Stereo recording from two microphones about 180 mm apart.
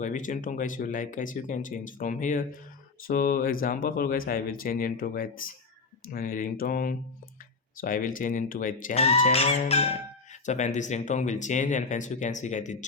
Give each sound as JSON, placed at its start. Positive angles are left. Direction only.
{"t": 0.0, "sound": "speech", "side_deg": 45}
{"t": 9.0, "sound": "music", "side_deg": 35}
{"t": 10.4, "sound": "speech", "side_deg": 40}